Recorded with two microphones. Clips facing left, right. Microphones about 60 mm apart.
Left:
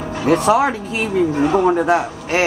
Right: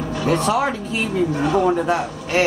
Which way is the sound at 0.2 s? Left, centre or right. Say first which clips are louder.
Left 5 dB; centre.